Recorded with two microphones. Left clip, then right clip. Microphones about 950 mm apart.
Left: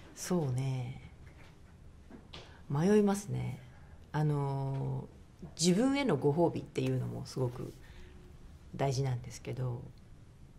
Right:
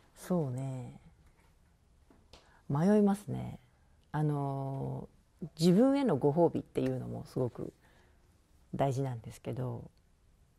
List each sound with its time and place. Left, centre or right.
0.3 s speech: right
2.7 s speech: right
8.7 s speech: right